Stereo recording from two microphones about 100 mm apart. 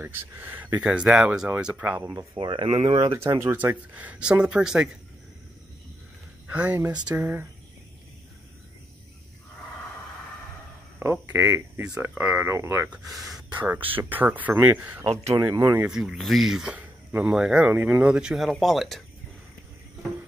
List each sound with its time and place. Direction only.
0.0 s speech: 20° right (ahead or behind)
0.8 s speech: 5° right (ahead or behind)
2.3 s speech: 60° right (ahead or behind)
3.0 s speech: 35° right (ahead or behind)
3.5 s speech: 15° right (ahead or behind)
6.4 s speech: 15° right (ahead or behind)
11.0 s speech: 20° right (ahead or behind)
11.8 s speech: 10° right (ahead or behind)
13.1 s speech: centre (ahead or behind)
13.5 s speech: 15° right (ahead or behind)
15.2 s speech: 35° right (ahead or behind)
15.9 s speech: 5° right (ahead or behind)